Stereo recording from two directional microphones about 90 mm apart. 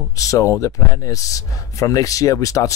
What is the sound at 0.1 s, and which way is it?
Speech, 40° left (ahead or behind).